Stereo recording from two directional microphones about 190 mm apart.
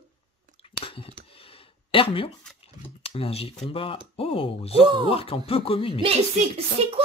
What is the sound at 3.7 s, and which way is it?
Speech, 30° left (ahead or behind).